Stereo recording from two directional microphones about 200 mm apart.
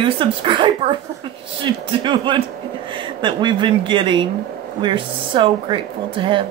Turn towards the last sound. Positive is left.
turn(degrees=-25)  # may be behind; listen again after turning